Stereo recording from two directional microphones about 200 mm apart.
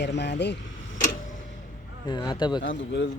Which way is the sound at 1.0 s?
40° left (ahead or behind).